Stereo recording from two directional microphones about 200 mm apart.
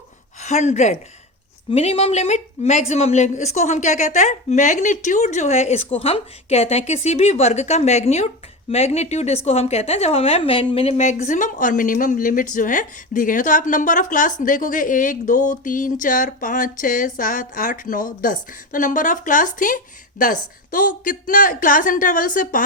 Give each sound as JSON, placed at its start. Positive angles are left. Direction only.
{"t": 0.4, "sound": "a woman's voice", "side_deg": 35}